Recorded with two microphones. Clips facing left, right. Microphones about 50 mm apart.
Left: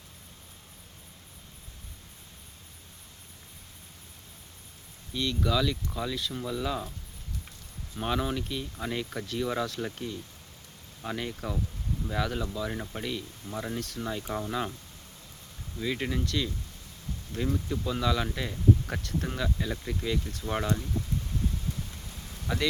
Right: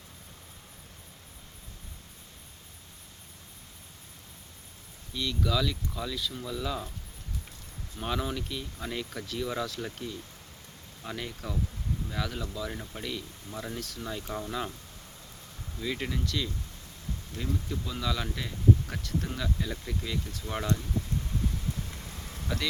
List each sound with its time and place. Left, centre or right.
5.2 s speech: centre
7.9 s speech: centre
14.1 s speech: centre
15.8 s speech: centre
22.1 s vehicle: right